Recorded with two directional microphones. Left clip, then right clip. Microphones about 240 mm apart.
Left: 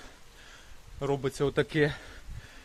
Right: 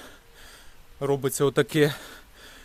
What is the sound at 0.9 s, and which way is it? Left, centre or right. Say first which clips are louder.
Speech: right 5 dB; right.